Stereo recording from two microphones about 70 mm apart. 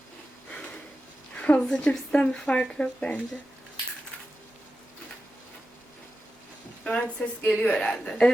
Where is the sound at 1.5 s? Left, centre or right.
Centre.